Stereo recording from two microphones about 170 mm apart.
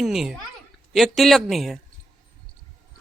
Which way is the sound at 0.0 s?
Centre (ahead or behind).